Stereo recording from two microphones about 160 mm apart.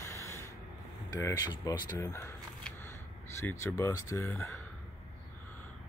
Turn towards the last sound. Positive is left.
turn(degrees=15)  # may be behind; listen again after turning